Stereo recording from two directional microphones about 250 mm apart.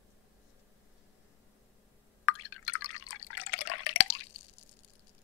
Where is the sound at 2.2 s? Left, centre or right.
Left.